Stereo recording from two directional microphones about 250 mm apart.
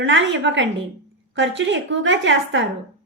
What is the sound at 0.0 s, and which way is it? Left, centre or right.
A woman's voice, right.